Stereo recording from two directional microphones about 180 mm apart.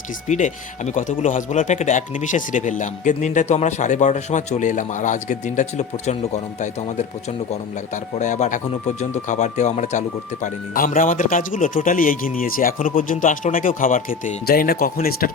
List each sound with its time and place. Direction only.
0.3 s speech: 40° left (ahead or behind)
8.2 s speech: 40° left (ahead or behind)